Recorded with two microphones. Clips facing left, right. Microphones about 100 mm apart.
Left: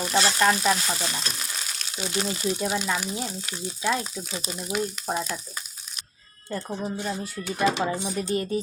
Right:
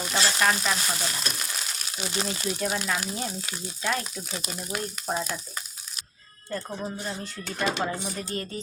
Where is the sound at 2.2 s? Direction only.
25° right (ahead or behind).